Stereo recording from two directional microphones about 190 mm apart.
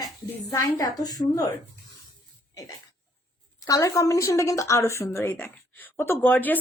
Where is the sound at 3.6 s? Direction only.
20° left (ahead or behind).